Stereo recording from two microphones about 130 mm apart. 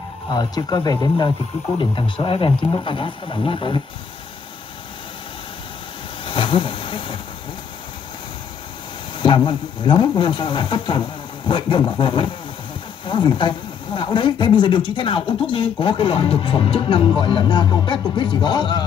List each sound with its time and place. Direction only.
0.3 s speech: 30° left (ahead or behind)
6.2 s a sound: 40° left (ahead or behind)
9.2 s speech: 40° left (ahead or behind)